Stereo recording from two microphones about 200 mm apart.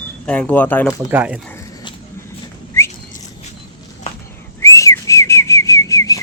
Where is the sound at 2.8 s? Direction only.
15° left (ahead or behind).